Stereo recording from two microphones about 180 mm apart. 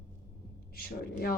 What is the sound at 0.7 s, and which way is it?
Speech, 60° left (ahead or behind).